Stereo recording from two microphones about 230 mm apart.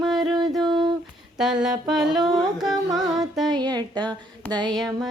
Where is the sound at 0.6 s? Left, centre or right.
Centre.